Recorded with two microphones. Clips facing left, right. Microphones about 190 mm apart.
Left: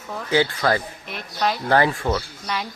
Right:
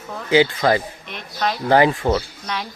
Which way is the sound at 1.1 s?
Centre (ahead or behind).